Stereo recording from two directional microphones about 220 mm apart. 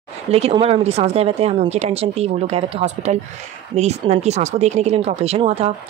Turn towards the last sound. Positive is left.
turn(degrees=-25)  # may be behind; listen again after turning